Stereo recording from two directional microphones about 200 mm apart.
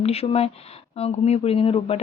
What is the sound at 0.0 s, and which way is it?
Speech, 30° left (ahead or behind).